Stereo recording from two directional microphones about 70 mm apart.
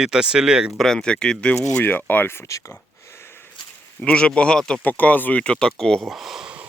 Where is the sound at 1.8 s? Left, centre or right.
Left.